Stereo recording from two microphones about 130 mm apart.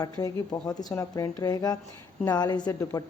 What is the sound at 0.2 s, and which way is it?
A woman's voice, 30° left (ahead or behind).